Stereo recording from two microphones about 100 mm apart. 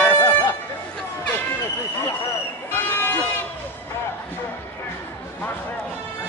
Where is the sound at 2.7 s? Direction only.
20° left (ahead or behind).